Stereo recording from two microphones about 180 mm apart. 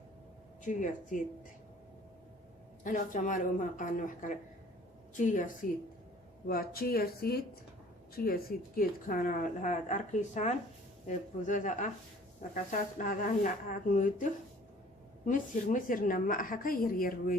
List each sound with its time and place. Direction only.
0.6 s a woman's voice: 45° left (ahead or behind)
2.8 s a woman's voice: 45° left (ahead or behind)
6.5 s a woman's voice: 55° left (ahead or behind)